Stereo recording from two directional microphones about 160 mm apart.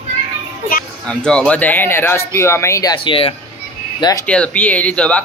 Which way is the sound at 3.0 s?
35° left (ahead or behind).